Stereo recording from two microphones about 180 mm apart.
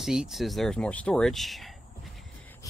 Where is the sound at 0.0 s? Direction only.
Centre (ahead or behind).